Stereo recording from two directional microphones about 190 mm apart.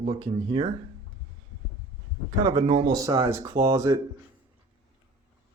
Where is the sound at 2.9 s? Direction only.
15° right (ahead or behind).